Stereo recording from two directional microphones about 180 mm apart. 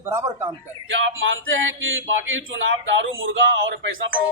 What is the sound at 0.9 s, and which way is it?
A man's voice, 90° right.